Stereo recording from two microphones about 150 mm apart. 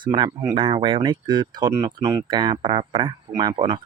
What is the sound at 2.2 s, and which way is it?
Speech, 30° right (ahead or behind).